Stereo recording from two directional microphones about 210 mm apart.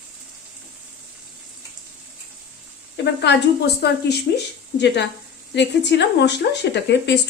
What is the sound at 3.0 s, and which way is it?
Speech, 55° left (ahead or behind).